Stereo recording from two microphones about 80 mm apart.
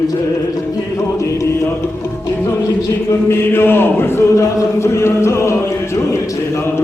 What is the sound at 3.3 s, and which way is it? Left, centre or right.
Chant, left.